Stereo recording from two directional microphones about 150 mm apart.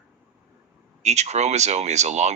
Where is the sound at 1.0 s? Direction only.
50° right (ahead or behind).